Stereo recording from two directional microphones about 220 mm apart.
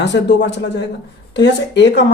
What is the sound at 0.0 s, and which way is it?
Speech, 50° left (ahead or behind).